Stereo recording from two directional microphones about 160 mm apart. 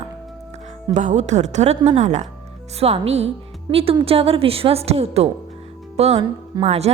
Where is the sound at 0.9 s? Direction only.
45° right (ahead or behind).